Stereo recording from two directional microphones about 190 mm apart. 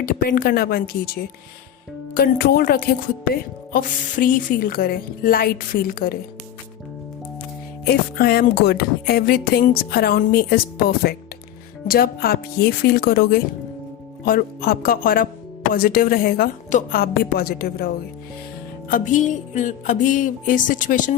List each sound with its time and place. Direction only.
0.0 s speech: 50° left (ahead or behind)
7.9 s speech: 55° left (ahead or behind)
18.9 s speech: 45° left (ahead or behind)